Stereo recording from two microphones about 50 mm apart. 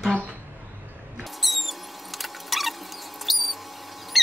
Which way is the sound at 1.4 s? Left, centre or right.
Centre.